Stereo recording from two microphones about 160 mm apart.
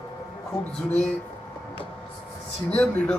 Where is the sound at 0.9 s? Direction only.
45° left (ahead or behind).